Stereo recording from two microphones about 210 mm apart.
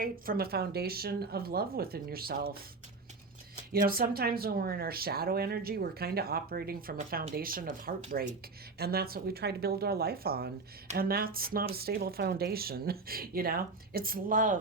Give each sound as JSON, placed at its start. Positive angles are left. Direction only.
{"t": 0.0, "sound": "speech", "side_deg": -45}
{"t": 3.7, "sound": "speech", "side_deg": -45}